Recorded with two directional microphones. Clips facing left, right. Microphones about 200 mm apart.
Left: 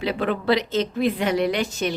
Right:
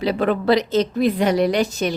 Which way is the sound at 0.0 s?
40° right (ahead or behind).